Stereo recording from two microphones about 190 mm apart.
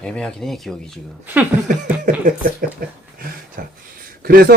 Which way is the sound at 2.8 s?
50° right (ahead or behind).